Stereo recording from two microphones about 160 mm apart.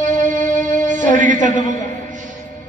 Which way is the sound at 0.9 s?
50° right (ahead or behind).